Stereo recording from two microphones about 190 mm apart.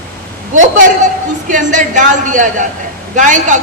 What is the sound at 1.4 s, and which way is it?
A man's voice, 40° right (ahead or behind).